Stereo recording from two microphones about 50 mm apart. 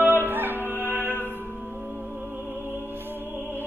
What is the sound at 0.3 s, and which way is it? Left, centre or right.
Music, right.